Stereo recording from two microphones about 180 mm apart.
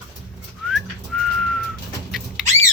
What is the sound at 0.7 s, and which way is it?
Whistling, centre (ahead or behind).